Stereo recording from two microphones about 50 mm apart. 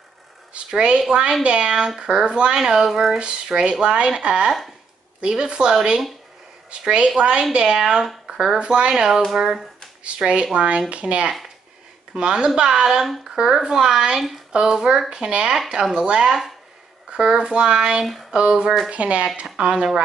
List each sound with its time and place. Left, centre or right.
0.7 s a woman's voice: centre
3.2 s a woman's voice: centre
10.1 s a woman's voice: centre